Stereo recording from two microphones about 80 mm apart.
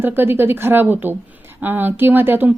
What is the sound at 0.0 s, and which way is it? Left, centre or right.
A woman's voice, right.